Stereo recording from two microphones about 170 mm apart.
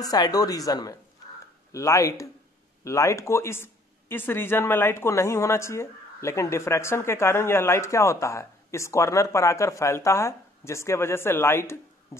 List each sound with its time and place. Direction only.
0.0 s speech: 20° left (ahead or behind)